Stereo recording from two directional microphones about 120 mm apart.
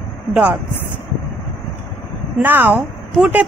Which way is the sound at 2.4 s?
15° right (ahead or behind).